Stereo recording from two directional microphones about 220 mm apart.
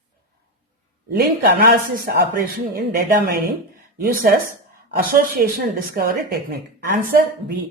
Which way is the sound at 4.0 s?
40° right (ahead or behind).